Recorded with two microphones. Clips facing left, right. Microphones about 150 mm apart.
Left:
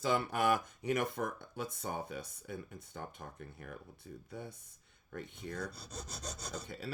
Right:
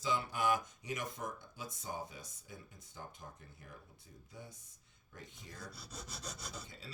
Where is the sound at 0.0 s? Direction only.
60° left (ahead or behind).